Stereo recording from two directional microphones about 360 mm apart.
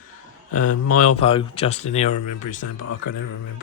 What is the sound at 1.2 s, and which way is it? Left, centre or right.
Speech, centre.